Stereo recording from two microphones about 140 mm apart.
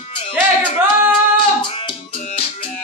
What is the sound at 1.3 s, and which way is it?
Music, 35° left (ahead or behind).